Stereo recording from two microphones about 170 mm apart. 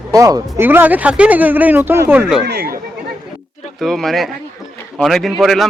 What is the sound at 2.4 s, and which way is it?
Speech, 65° right (ahead or behind).